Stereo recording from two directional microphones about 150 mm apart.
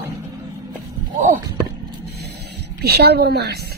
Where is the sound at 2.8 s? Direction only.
90° right.